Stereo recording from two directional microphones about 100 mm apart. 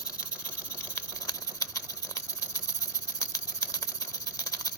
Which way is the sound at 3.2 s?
35° left (ahead or behind).